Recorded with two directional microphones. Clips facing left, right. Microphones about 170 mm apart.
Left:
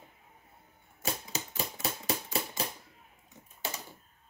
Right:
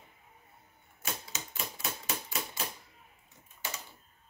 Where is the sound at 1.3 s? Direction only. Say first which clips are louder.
Left 4 dB; 35° left (ahead or behind).